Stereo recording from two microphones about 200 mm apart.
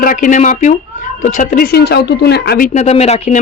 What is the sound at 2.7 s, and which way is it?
Speech, 35° left (ahead or behind).